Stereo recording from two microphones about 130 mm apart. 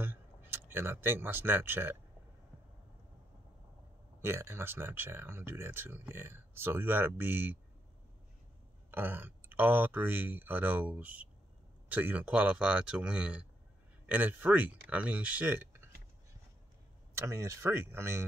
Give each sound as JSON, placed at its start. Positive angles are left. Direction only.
{"t": 0.0, "sound": "speech", "side_deg": -15}
{"t": 4.2, "sound": "speech", "side_deg": -20}
{"t": 8.9, "sound": "speech", "side_deg": -15}
{"t": 17.1, "sound": "speech", "side_deg": -20}